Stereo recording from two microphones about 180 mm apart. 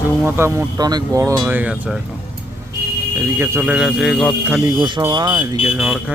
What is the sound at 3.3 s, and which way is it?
Speech, 10° right (ahead or behind).